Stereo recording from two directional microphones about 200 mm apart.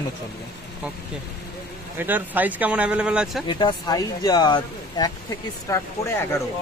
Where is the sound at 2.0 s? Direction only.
10° right (ahead or behind).